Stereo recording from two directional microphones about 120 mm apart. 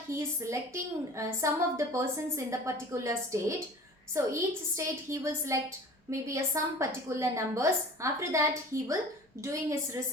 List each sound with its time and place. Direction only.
0.1 s a woman's voice: 25° right (ahead or behind)